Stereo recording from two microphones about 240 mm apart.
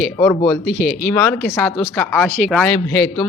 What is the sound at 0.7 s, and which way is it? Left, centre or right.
Speech, left.